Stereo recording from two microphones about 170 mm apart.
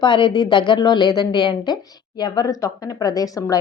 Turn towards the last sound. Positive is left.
turn(degrees=20)  # may be behind; listen again after turning